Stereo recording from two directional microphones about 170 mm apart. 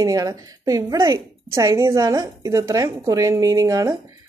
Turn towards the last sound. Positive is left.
turn(degrees=-20)  # may be behind; listen again after turning